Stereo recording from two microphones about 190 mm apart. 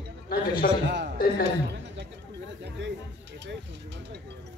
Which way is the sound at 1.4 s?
65° right (ahead or behind).